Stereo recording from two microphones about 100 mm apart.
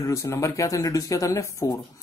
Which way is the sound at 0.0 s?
30° left (ahead or behind).